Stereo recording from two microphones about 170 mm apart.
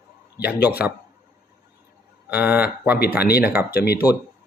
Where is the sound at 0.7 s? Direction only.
10° right (ahead or behind).